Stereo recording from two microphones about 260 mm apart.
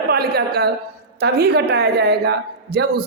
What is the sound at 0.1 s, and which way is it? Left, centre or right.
A woman's voice, right.